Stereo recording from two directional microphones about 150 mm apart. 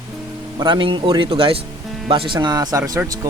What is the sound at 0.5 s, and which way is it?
A man's voice, 30° right (ahead or behind).